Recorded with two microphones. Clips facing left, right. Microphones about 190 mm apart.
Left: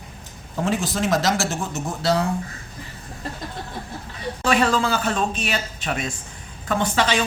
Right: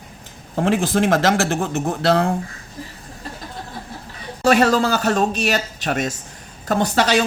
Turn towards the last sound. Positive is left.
turn(degrees=-40)  # may be behind; listen again after turning